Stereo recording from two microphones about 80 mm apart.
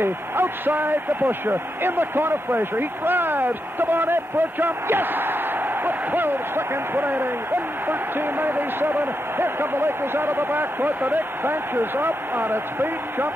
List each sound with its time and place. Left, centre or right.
0.0 s speech: right